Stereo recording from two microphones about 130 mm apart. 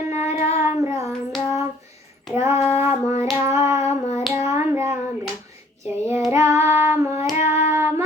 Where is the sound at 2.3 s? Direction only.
20° right (ahead or behind).